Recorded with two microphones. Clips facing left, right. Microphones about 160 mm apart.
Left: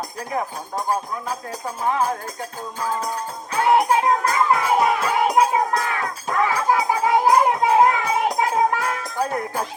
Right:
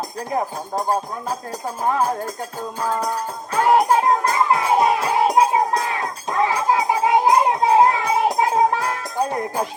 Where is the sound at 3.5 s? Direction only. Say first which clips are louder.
Right 2 dB; 40° right (ahead or behind).